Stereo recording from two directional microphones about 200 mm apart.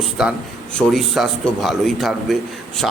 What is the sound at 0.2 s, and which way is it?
Speech, 5° right (ahead or behind).